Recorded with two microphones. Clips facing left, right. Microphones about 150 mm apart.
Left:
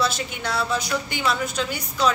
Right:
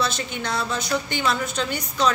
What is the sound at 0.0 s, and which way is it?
A woman's voice, 10° left (ahead or behind).